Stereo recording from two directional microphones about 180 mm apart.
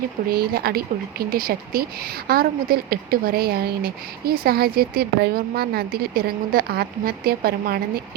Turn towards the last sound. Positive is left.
turn(degrees=-55)  # may be behind; listen again after turning